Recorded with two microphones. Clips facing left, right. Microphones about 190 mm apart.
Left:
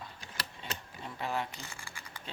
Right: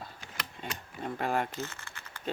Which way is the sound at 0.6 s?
50° right (ahead or behind).